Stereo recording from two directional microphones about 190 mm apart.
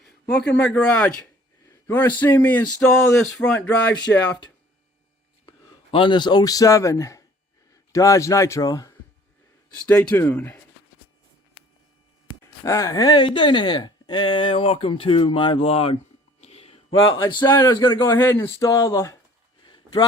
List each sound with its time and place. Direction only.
0.3 s a man's voice: 60° left (ahead or behind)
0.5 s speech: 10° left (ahead or behind)
5.9 s speech: 25° left (ahead or behind); by 10.6 s 10° left (ahead or behind)
12.6 s speech: 15° left (ahead or behind)
16.4 s a sound: 30° left (ahead or behind)
17.2 s speech: 20° left (ahead or behind)
19.6 s a sound: 20° left (ahead or behind)